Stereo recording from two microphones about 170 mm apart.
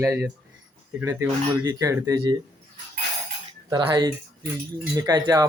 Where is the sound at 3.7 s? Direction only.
25° right (ahead or behind).